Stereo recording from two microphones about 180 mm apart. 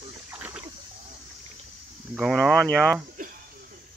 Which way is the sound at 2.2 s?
Centre (ahead or behind).